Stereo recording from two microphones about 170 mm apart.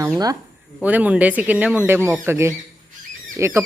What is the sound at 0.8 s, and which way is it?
Speech, 10° right (ahead or behind).